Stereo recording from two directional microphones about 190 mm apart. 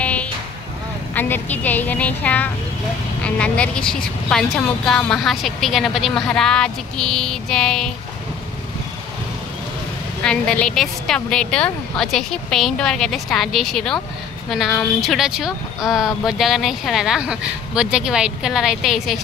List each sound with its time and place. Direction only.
0.0 s a sound: 5° left (ahead or behind)
1.1 s a woman's voice: 10° left (ahead or behind)
10.2 s a woman's voice: 5° left (ahead or behind)